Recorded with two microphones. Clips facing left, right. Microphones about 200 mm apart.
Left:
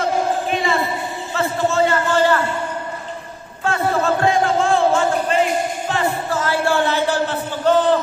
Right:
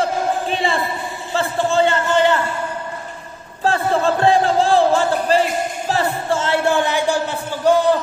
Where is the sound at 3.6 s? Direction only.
30° right (ahead or behind); by 7.7 s 10° right (ahead or behind).